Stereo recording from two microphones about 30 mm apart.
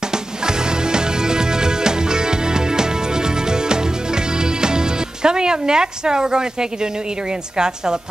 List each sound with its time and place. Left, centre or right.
0.1 s music: right
7.5 s a woman's voice: right